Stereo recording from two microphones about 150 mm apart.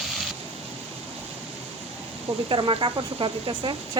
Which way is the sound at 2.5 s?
35° right (ahead or behind).